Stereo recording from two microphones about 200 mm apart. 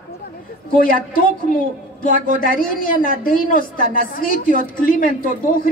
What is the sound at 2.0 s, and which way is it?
Speech, 45° left (ahead or behind).